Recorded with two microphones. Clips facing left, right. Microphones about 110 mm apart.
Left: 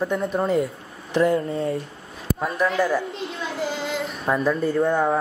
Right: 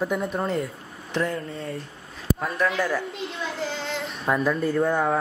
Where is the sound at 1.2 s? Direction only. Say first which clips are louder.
Left 9 dB; 15° left (ahead or behind).